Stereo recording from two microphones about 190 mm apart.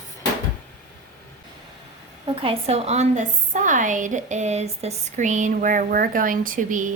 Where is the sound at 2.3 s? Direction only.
30° right (ahead or behind).